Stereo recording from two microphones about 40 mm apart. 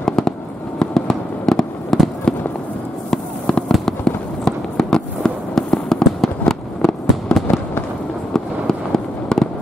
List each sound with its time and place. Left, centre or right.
0.0 s fireworks: centre
3.1 s fireworks: left